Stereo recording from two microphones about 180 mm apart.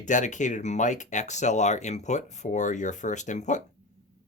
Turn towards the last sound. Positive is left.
turn(degrees=40)  # may be behind; listen again after turning